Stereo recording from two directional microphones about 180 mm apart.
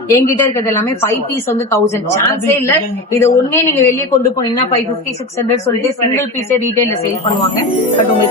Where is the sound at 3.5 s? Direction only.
15° left (ahead or behind).